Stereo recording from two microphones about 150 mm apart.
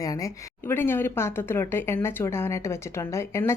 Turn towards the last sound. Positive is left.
turn(degrees=20)  # may be behind; listen again after turning